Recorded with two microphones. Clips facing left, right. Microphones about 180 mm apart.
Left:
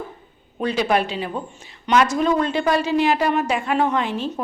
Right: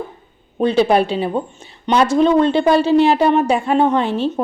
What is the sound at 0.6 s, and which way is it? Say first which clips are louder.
A woman's voice: right 6 dB; 30° right (ahead or behind).